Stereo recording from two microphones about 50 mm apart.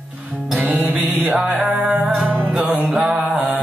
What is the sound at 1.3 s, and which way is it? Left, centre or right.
Music, centre.